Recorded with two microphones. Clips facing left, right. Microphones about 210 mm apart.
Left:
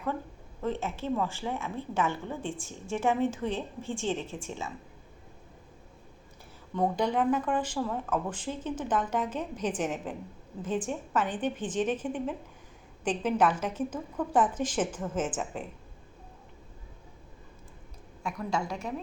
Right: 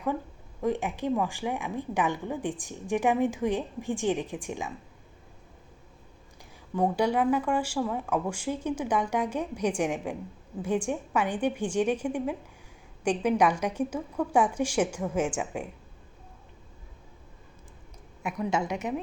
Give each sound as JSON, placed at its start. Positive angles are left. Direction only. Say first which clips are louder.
{"t": 0.6, "sound": "a woman's voice", "louder": "right 4 dB", "side_deg": -15}
{"t": 6.7, "sound": "a woman's voice", "louder": "right 2 dB", "side_deg": -10}
{"t": 18.3, "sound": "a woman's voice", "louder": "right 4 dB", "side_deg": -20}